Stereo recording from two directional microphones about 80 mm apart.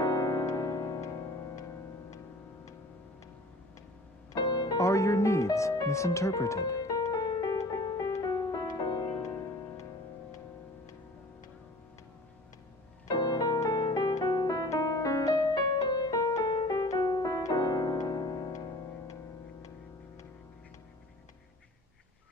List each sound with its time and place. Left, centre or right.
0.0 s music: left
4.4 s music: left
4.7 s speech: left
5.9 s music: left
13.1 s music: left
13.8 s music: left
17.2 s piano: left